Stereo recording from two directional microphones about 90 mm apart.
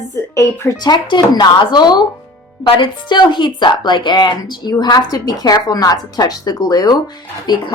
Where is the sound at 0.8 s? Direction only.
55° left (ahead or behind).